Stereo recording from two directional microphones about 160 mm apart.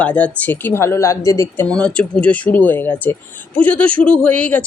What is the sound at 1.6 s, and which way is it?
Speech, 5° left (ahead or behind).